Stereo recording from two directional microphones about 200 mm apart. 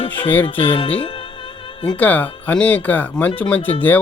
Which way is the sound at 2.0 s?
5° left (ahead or behind).